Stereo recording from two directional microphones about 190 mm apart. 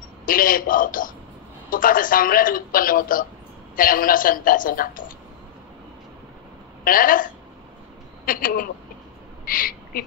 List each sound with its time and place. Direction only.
0.2 s a man's voice: 45° left (ahead or behind)
6.8 s a woman's voice: 45° left (ahead or behind)